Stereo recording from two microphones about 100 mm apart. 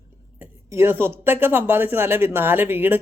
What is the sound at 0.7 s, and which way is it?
Speech, 25° right (ahead or behind).